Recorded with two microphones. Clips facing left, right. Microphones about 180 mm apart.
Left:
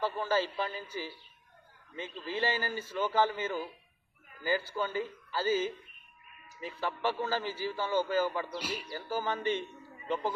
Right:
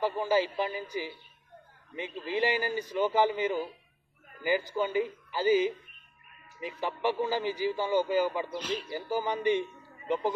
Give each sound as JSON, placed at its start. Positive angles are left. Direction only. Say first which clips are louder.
{"t": 0.0, "sound": "a man's voice", "louder": "right 4 dB", "side_deg": -15}
{"t": 6.8, "sound": "a man's voice", "louder": "right 3 dB", "side_deg": -15}
{"t": 8.5, "sound": "speech", "louder": "right 4 dB", "side_deg": 10}
{"t": 8.9, "sound": "a man's voice", "louder": "right 2 dB", "side_deg": -15}